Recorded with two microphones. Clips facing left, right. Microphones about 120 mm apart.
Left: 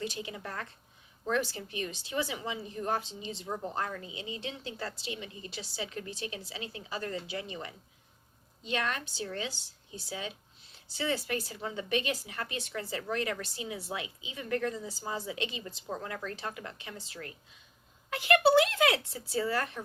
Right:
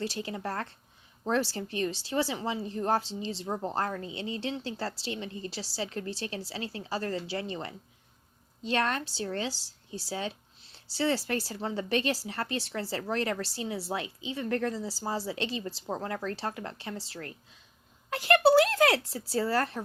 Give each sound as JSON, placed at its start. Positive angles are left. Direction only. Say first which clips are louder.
{"t": 0.0, "sound": "a woman's voice", "louder": "right 4 dB", "side_deg": -35}